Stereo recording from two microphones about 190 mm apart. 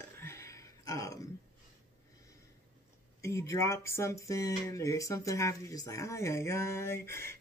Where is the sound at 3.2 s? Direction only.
15° left (ahead or behind).